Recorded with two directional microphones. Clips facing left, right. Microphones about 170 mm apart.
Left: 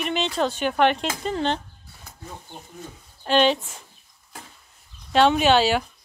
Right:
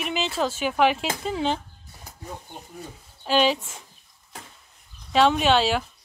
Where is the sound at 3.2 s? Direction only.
Centre (ahead or behind).